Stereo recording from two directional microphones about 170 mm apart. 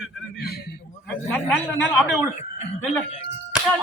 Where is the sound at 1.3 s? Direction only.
10° left (ahead or behind).